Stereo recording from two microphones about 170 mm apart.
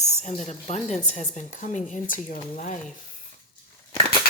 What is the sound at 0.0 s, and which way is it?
Speech, 40° left (ahead or behind).